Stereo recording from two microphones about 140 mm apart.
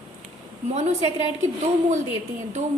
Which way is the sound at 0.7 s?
50° right (ahead or behind).